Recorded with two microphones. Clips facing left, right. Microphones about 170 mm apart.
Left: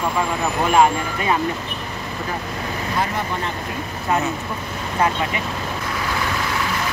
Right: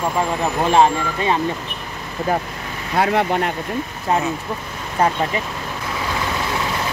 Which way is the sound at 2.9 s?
75° right (ahead or behind).